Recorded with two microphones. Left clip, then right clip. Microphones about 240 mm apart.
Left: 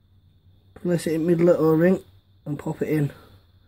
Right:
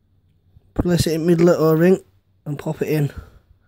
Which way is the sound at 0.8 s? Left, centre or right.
Right.